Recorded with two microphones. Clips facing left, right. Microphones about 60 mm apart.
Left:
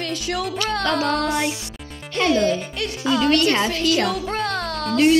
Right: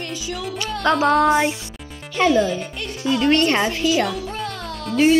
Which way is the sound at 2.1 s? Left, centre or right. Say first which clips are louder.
Right 1 dB; left.